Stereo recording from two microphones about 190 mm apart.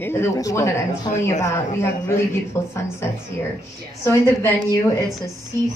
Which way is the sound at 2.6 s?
15° left (ahead or behind).